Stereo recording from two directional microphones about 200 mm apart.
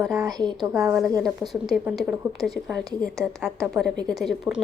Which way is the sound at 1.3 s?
Centre (ahead or behind).